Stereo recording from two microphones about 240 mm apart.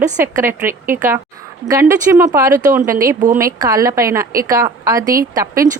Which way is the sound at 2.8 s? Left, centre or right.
Right.